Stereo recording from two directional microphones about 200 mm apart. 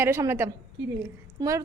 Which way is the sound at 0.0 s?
15° right (ahead or behind).